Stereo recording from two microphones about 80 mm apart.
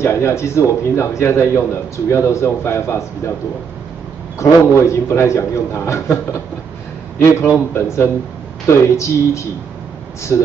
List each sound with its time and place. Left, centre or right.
0.0 s a man's voice: left
4.4 s a man's voice: left
7.2 s a man's voice: left